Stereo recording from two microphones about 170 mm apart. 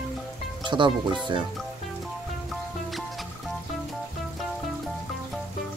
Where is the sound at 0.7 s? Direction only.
30° right (ahead or behind).